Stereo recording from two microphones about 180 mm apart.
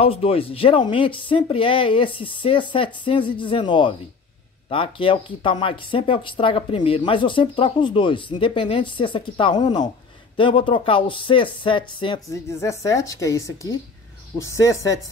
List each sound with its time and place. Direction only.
0.0 s speech: 30° left (ahead or behind)